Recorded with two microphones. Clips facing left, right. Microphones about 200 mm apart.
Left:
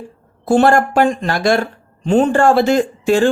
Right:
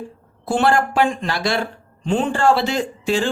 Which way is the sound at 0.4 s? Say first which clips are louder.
Left 6 dB; 45° left (ahead or behind).